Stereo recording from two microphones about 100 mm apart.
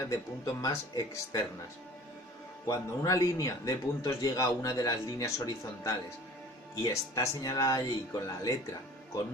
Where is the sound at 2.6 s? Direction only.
35° left (ahead or behind).